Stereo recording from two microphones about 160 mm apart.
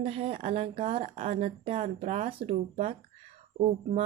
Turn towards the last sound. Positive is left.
turn(degrees=-40)  # may be behind; listen again after turning